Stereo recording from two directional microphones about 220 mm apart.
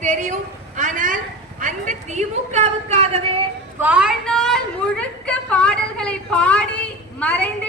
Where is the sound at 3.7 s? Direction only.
5° right (ahead or behind).